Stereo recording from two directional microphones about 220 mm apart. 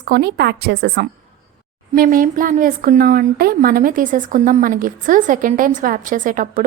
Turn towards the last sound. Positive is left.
turn(degrees=-40)  # may be behind; listen again after turning